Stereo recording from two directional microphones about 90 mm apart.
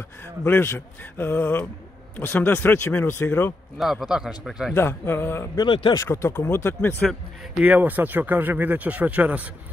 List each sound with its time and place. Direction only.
0.5 s a man's voice: 25° left (ahead or behind)
3.7 s a man's voice: 5° right (ahead or behind)
4.7 s a man's voice: 25° left (ahead or behind)
7.6 s speech: 20° right (ahead or behind)